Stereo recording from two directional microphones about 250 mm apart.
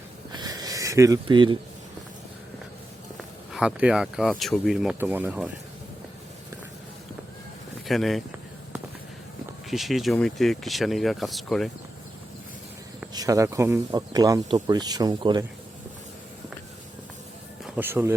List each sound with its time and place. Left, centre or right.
0.3 s a sound: centre
3.5 s speech: centre
7.9 s speech: centre
9.6 s speech: centre
13.1 s speech: centre
17.7 s speech: centre